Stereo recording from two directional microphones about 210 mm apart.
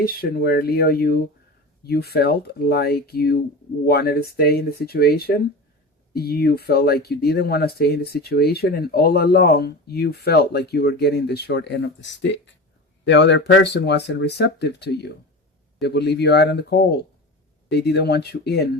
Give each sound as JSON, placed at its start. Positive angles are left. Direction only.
{"t": 0.0, "sound": "speech", "side_deg": 45}